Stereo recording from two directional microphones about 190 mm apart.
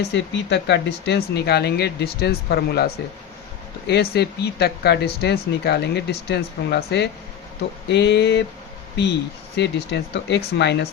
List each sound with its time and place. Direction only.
0.0 s speech: 65° left (ahead or behind)
9.6 s speech: 65° left (ahead or behind)